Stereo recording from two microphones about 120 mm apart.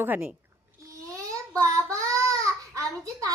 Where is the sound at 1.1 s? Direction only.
25° right (ahead or behind).